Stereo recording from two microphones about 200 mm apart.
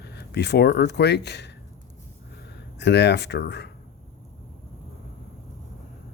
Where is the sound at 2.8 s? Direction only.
60° left (ahead or behind).